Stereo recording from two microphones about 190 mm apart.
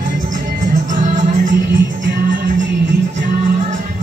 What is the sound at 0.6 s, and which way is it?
Music, 40° right (ahead or behind).